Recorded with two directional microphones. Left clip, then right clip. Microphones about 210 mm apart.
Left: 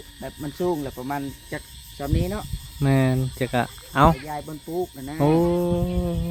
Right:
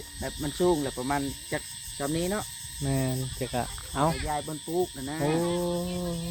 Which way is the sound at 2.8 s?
45° left (ahead or behind).